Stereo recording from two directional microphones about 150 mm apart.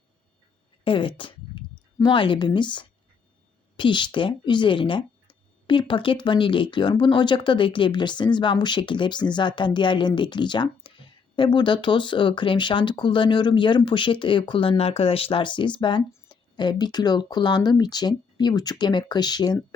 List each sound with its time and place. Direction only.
0.9 s speech: 35° left (ahead or behind)